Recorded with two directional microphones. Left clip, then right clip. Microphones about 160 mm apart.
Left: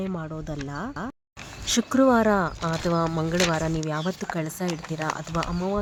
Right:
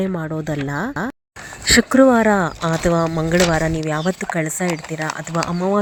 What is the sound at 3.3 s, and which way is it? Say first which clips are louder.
Speech: right 10 dB; 25° right (ahead or behind).